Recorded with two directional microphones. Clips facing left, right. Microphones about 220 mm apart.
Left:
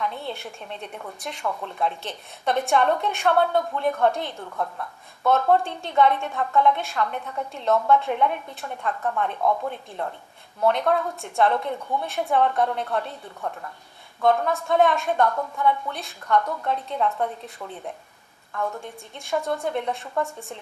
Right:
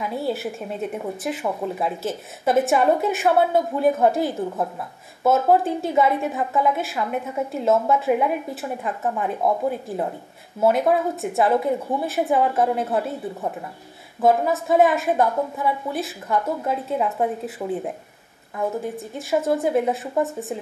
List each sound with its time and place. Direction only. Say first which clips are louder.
0.0 s a woman's voice: right 6 dB; 5° right (ahead or behind)
1.4 s a woman's voice: right 1 dB; 15° right (ahead or behind)
1.7 s a woman's voice: right 3 dB; 5° right (ahead or behind)
4.4 s a woman's voice: right 5 dB; 20° right (ahead or behind)
5.5 s a woman's voice: right 3 dB; 5° right (ahead or behind)
9.4 s speech: right 3 dB; 25° right (ahead or behind)
9.7 s a woman's voice: right 6 dB; 5° right (ahead or behind)
14.2 s a woman's voice: right 3 dB; 5° right (ahead or behind)
17.6 s speech: right 11 dB; 25° right (ahead or behind)
18.8 s a woman's voice: right 9 dB; 5° right (ahead or behind)